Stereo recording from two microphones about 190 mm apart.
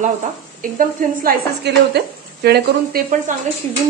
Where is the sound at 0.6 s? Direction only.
50° right (ahead or behind).